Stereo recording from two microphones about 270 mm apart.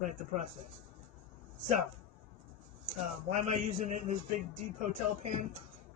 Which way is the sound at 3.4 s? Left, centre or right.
Right.